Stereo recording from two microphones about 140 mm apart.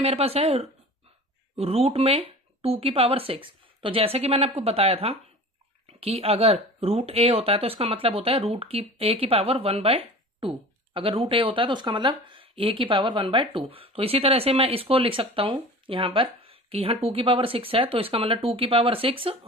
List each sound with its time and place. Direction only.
0.0 s speech: 45° right (ahead or behind)